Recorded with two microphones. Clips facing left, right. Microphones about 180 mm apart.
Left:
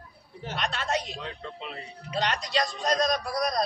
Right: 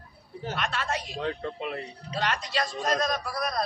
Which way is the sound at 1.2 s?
55° right (ahead or behind).